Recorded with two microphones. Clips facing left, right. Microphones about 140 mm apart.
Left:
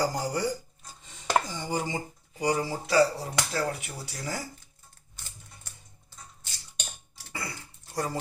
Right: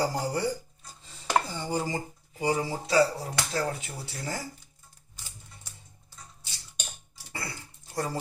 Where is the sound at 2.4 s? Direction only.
25° right (ahead or behind).